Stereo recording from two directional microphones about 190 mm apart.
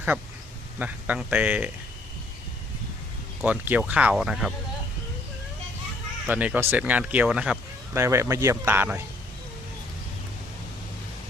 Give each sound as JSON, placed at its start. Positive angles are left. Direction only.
{"t": 0.8, "sound": "speech", "side_deg": -10}
{"t": 3.4, "sound": "speech", "side_deg": -10}
{"t": 6.2, "sound": "speech", "side_deg": -10}